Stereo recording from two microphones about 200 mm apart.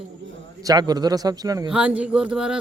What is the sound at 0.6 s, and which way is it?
A man's voice, 20° right (ahead or behind).